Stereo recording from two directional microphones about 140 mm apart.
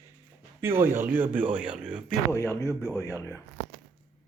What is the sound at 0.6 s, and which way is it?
Speech, 15° right (ahead or behind).